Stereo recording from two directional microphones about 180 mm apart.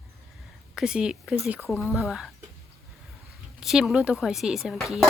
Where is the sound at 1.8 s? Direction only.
15° left (ahead or behind).